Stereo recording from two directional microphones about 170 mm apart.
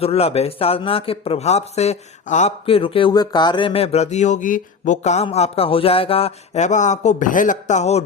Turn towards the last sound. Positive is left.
turn(degrees=40)  # may be behind; listen again after turning